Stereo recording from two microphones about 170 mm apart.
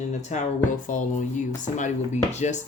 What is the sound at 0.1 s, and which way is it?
Speech, 45° left (ahead or behind).